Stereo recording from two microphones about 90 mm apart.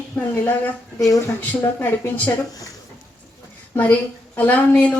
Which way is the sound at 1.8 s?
25° left (ahead or behind).